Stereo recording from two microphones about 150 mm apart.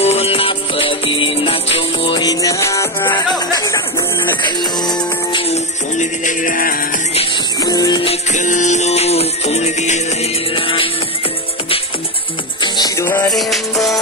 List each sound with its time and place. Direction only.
0.0 s music: 45° left (ahead or behind)
5.5 s music: 55° left (ahead or behind)
7.6 s music: 25° left (ahead or behind)
8.3 s music: 55° left (ahead or behind)
10.5 s music: 35° left (ahead or behind)
12.6 s music: 25° left (ahead or behind)
13.3 s music: centre (ahead or behind)